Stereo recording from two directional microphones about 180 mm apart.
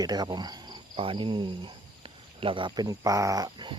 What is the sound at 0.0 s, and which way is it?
Speech, 20° right (ahead or behind).